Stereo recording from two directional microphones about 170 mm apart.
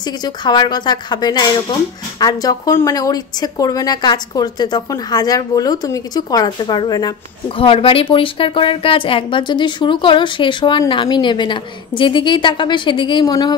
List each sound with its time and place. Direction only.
0.0 s speech: 25° left (ahead or behind)